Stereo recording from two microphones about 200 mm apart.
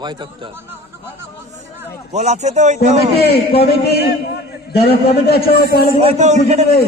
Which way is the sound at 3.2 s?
50° left (ahead or behind).